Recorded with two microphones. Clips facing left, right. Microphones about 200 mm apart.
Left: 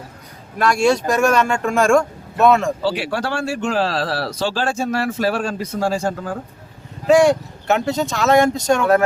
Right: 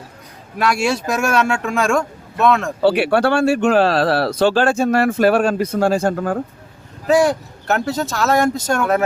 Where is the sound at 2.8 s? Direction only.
60° right (ahead or behind).